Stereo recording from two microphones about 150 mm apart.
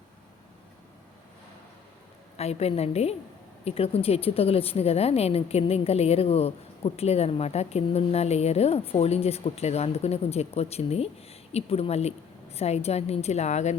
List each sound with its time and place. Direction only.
2.3 s speech: 45° left (ahead or behind)